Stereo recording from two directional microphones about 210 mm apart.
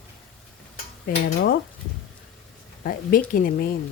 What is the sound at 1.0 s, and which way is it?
Speech, 45° left (ahead or behind).